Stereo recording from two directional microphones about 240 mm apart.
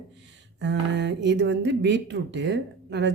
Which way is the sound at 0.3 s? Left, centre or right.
Right.